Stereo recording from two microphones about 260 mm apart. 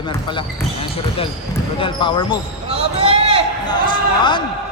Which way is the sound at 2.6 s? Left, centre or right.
Right.